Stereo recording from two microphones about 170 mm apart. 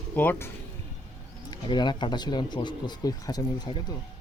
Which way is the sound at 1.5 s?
25° left (ahead or behind).